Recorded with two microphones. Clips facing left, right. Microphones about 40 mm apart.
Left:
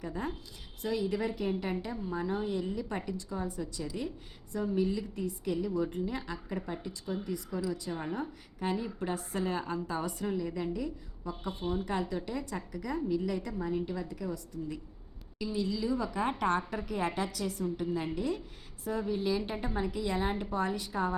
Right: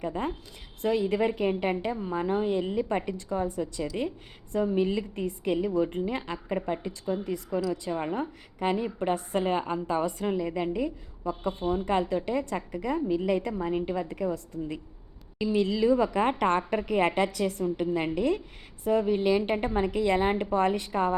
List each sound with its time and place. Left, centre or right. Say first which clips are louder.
0.0 s a woman's voice: right 6 dB; right